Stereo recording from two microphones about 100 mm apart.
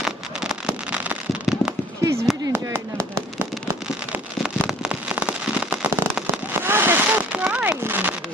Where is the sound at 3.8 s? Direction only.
5° right (ahead or behind).